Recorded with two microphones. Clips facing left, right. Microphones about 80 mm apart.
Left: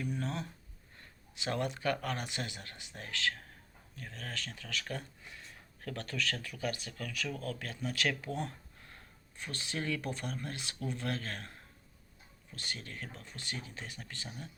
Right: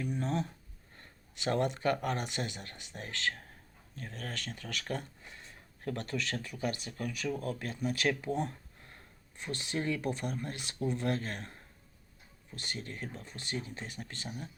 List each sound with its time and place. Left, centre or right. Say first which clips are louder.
0.0 s speech: right 2 dB; centre
1.5 s speech: right 4 dB; right